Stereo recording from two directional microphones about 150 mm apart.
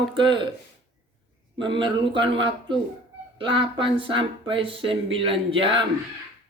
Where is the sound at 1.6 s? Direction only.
35° right (ahead or behind).